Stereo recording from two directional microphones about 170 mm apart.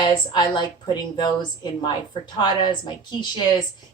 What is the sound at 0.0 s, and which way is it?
A woman's voice, 25° left (ahead or behind).